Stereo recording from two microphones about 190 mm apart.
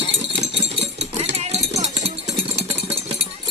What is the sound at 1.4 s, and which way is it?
Run, 35° right (ahead or behind).